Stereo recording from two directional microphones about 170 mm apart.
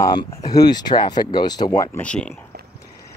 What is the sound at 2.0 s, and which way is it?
Speech, 5° left (ahead or behind).